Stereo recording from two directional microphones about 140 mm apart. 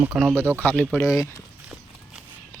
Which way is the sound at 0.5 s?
10° left (ahead or behind).